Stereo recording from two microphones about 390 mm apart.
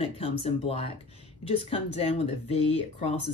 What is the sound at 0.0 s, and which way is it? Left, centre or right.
Speech, centre.